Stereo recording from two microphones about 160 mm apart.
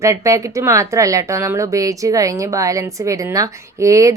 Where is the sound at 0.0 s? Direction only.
20° right (ahead or behind).